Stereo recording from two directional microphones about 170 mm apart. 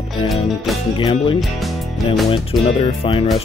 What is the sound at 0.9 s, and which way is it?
Speech, 30° left (ahead or behind).